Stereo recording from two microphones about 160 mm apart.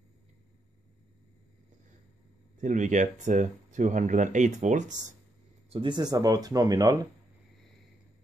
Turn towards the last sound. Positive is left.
turn(degrees=-25)  # may be behind; listen again after turning